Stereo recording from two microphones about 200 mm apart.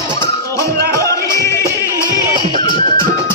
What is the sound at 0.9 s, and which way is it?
Music, 15° left (ahead or behind).